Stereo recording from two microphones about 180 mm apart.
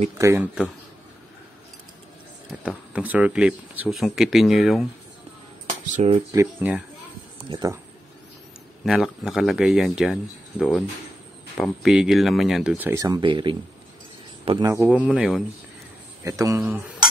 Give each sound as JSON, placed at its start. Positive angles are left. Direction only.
{"t": 0.2, "sound": "speech", "side_deg": -10}
{"t": 2.6, "sound": "speech", "side_deg": -5}
{"t": 5.9, "sound": "speech", "side_deg": -35}
{"t": 6.3, "sound": "speech", "side_deg": -10}
{"t": 8.8, "sound": "a man's voice", "side_deg": 0}
{"t": 14.7, "sound": "speech", "side_deg": -10}
{"t": 16.3, "sound": "speech", "side_deg": -15}